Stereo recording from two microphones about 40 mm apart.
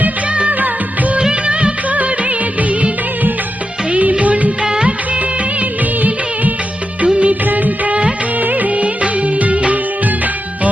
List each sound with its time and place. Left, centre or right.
0.3 s music of bollywood: right
0.5 s music: right
1.2 s music of bollywood: right
4.6 s music of bollywood: right
6.0 s music of bollywood: right
7.0 s music: right
7.4 s music: right
8.4 s music of bollywood: right